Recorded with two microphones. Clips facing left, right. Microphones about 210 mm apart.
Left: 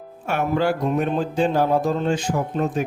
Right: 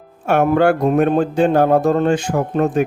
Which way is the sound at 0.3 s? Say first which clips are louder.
Right 7 dB; 60° right (ahead or behind).